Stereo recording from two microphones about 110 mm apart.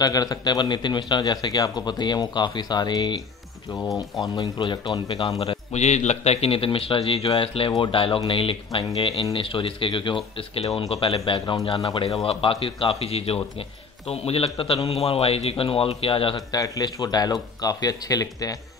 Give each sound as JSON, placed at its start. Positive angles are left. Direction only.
{"t": 0.0, "sound": "a man's voice", "side_deg": 35}
{"t": 4.2, "sound": "speech", "side_deg": 40}
{"t": 5.4, "sound": "speech", "side_deg": 75}
{"t": 16.3, "sound": "a man's voice", "side_deg": 35}